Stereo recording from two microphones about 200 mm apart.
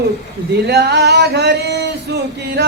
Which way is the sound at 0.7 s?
55° right (ahead or behind).